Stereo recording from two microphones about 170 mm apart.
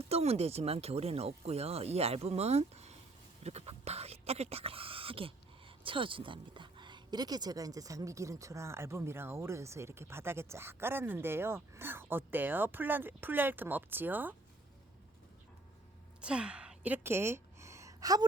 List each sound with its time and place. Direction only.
0.1 s speech: 35° right (ahead or behind); by 14.3 s 10° right (ahead or behind)
16.2 s gasp: 5° right (ahead or behind); by 18.3 s 20° right (ahead or behind)